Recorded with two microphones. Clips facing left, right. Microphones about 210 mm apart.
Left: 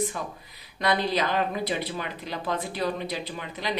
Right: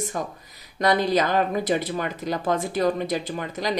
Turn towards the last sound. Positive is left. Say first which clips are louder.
# right 5 dB
turn(degrees=-45)  # may be behind; listen again after turning